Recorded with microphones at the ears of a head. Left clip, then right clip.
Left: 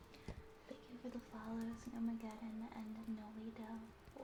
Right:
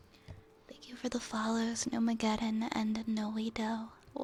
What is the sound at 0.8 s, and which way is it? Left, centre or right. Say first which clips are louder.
Speech: right 16 dB; right.